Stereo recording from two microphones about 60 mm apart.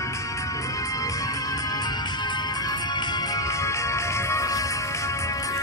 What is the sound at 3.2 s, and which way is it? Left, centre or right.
Music, left.